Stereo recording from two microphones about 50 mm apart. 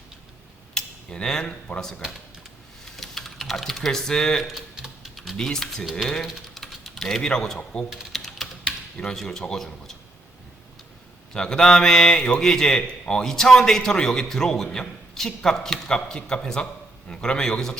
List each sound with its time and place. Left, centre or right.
0.7 s a sound: centre
2.8 s typing: centre
4.7 s typing: centre
5.4 s a man's voice: centre
6.2 s typing: centre
7.0 s a man's voice: centre
8.1 s typing: centre
9.0 s a man's voice: centre
11.3 s a man's voice: centre